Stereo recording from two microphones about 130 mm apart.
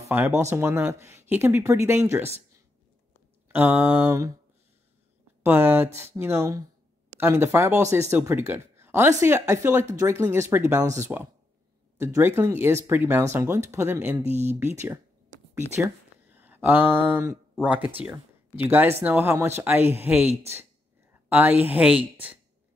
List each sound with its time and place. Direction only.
0.4 s speech: 20° right (ahead or behind)
3.4 s speech: 10° right (ahead or behind)
4.1 s speech: 25° right (ahead or behind)
5.4 s speech: 15° right (ahead or behind)
14.2 s speech: 60° right (ahead or behind)
15.5 s a sound: 15° right (ahead or behind)
17.6 s speech: 10° right (ahead or behind)
21.3 s speech: 10° right (ahead or behind)